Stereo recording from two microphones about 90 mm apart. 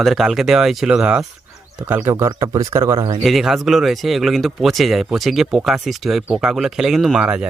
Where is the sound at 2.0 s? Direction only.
30° right (ahead or behind).